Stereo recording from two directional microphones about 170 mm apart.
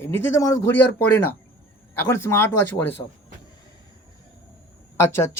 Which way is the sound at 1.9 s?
15° left (ahead or behind).